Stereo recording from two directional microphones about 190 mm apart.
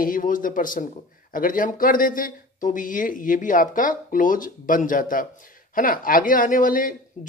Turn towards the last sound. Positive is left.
turn(degrees=45)  # may be behind; listen again after turning